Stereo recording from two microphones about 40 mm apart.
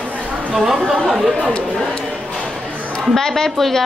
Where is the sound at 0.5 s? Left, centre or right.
Centre.